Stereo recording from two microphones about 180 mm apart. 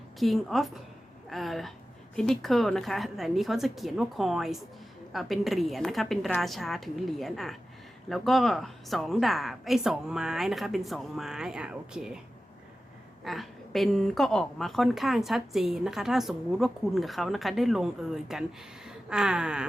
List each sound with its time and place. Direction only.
0.2 s a woman's voice: centre (ahead or behind)
13.2 s a woman's voice: centre (ahead or behind)
18.9 s a sound: 5° right (ahead or behind)